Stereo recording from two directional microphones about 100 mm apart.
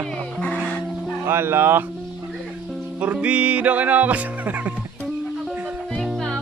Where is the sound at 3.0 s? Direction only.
15° right (ahead or behind).